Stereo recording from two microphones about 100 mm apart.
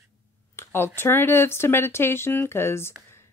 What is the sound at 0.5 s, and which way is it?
Speech, 25° left (ahead or behind).